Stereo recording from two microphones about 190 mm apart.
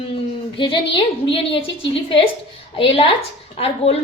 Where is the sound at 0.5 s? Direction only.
25° left (ahead or behind).